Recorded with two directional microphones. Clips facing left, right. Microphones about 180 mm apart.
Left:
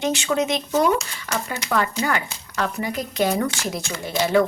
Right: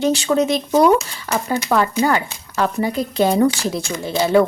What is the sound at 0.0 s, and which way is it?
Speech, 35° right (ahead or behind).